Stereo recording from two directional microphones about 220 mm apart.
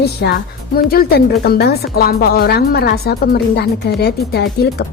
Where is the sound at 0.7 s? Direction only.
45° left (ahead or behind).